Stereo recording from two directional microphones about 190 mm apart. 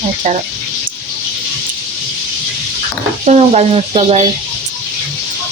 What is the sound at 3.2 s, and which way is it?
Speech, 35° right (ahead or behind).